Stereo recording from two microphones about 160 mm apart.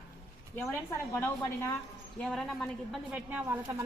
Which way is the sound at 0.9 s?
15° left (ahead or behind).